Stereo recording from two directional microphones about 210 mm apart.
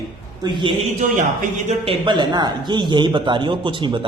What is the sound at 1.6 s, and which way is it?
Speech, 25° right (ahead or behind).